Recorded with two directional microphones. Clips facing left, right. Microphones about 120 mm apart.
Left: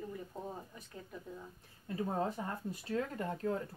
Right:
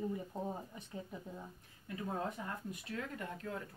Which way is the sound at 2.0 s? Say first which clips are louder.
Left 4 dB; 30° left (ahead or behind).